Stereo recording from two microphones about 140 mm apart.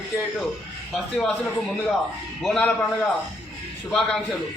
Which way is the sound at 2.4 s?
5° left (ahead or behind).